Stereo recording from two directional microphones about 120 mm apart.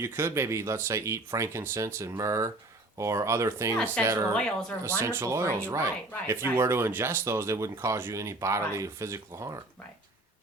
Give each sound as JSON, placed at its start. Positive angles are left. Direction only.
{"t": 0.0, "sound": "speech", "side_deg": -20}